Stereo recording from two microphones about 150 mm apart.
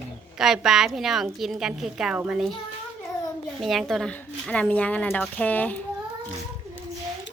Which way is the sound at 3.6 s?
Centre (ahead or behind).